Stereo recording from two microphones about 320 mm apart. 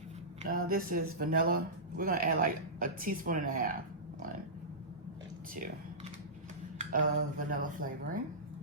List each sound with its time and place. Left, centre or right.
0.4 s speech: right
6.7 s speech: right